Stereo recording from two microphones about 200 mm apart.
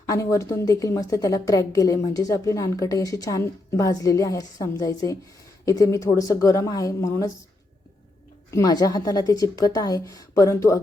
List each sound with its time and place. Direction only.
0.0 s a woman's voice: 15° left (ahead or behind)
8.4 s a woman's voice: 15° left (ahead or behind)